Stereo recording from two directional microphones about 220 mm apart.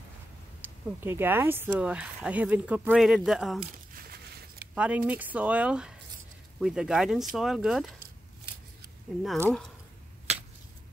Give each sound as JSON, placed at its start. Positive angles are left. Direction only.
{"t": 0.6, "sound": "speech", "side_deg": -10}
{"t": 3.9, "sound": "a sound", "side_deg": -45}
{"t": 4.7, "sound": "speech", "side_deg": -5}
{"t": 9.2, "sound": "speech", "side_deg": 0}